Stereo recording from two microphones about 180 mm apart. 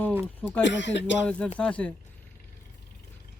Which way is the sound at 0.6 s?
80° left.